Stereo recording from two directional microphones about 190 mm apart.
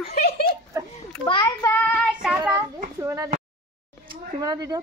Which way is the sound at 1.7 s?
5° left (ahead or behind).